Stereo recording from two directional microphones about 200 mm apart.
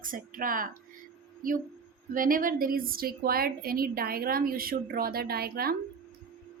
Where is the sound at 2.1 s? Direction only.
45° right (ahead or behind).